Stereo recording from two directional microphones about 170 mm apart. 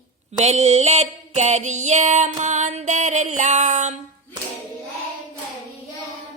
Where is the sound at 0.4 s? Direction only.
40° right (ahead or behind).